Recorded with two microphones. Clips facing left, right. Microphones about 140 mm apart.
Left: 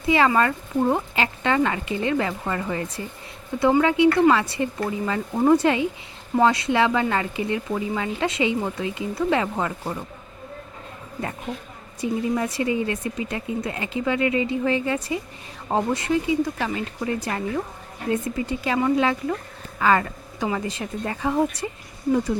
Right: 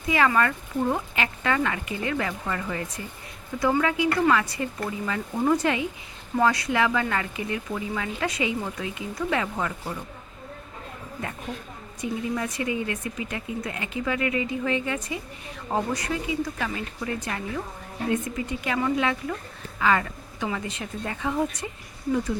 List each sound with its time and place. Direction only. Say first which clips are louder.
0.1 s speech: left 3 dB; 25° left (ahead or behind)
11.9 s speech: left 5 dB; 30° left (ahead or behind)